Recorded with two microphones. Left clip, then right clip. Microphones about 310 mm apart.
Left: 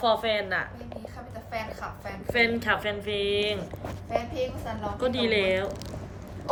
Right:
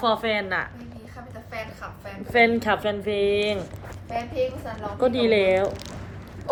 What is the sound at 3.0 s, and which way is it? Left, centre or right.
Speech, left.